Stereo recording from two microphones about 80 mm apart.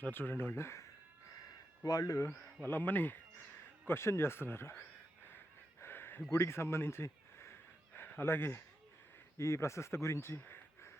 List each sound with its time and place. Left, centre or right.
0.0 s speech: left
1.8 s speech: left
2.2 s speech: left
5.8 s a sound: left
6.3 s speech: left